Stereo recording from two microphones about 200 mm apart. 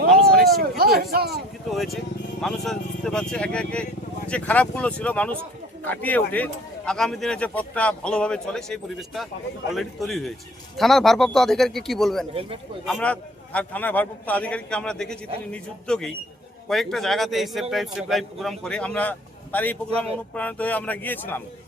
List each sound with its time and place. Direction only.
0.1 s a sound: centre (ahead or behind)
0.4 s a sound: 50° right (ahead or behind)
0.8 s speech: 50° right (ahead or behind)
1.7 s a man's voice: centre (ahead or behind)
12.3 s a man's voice: 30° right (ahead or behind)
12.8 s a man's voice: 5° left (ahead or behind)